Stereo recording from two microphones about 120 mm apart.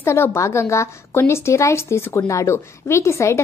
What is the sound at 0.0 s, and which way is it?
A woman's voice, 20° left (ahead or behind).